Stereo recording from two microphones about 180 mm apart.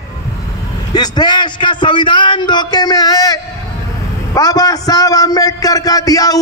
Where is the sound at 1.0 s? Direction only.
25° left (ahead or behind).